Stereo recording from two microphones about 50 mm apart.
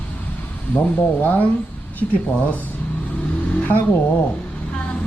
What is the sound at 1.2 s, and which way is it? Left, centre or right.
Speech, left.